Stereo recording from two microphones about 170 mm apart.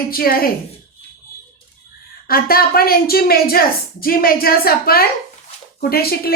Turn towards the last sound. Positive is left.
turn(degrees=65)  # may be behind; listen again after turning